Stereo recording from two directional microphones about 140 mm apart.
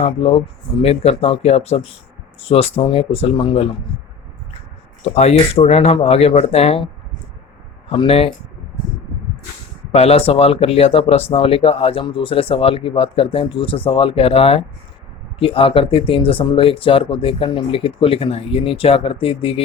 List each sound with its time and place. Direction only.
0.0 s speech: 45° left (ahead or behind)
5.0 s speech: 50° left (ahead or behind)
9.9 s speech: 45° left (ahead or behind)